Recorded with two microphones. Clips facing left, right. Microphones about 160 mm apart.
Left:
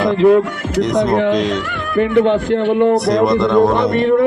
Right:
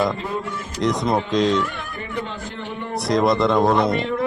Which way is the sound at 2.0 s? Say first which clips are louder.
Left 19 dB; 75° left (ahead or behind).